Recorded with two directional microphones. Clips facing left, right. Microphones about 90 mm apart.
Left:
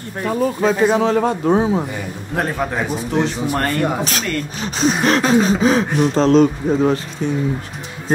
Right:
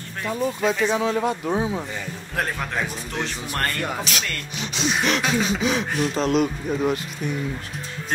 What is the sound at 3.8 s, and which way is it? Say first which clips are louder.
Speech: left 7 dB; 40° left (ahead or behind).